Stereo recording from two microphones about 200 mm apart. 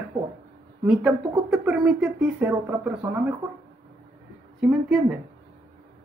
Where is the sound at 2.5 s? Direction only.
15° right (ahead or behind).